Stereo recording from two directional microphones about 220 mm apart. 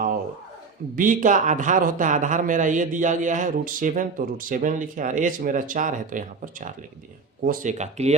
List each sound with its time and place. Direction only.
0.9 s speech: 40° right (ahead or behind)